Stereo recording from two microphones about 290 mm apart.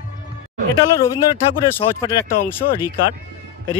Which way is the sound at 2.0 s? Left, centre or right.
Centre.